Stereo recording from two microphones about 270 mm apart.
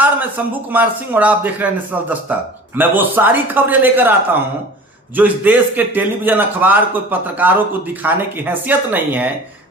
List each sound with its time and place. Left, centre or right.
0.0 s a man's voice: centre
5.1 s a man's voice: centre